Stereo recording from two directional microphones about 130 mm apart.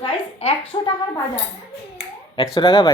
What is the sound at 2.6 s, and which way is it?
Speech, 40° left (ahead or behind).